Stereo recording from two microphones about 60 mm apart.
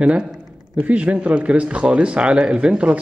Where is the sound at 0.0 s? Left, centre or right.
Centre.